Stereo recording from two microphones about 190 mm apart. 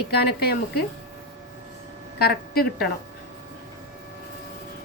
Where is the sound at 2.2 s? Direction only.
55° left (ahead or behind).